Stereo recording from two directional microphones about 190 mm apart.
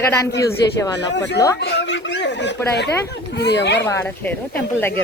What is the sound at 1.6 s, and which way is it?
Speech, 60° left (ahead or behind).